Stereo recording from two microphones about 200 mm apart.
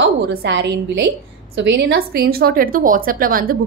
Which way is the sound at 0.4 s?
60° right (ahead or behind).